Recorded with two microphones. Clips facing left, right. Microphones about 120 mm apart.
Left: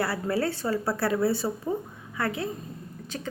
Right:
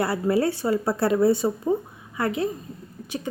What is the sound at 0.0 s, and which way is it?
Speech, 20° right (ahead or behind).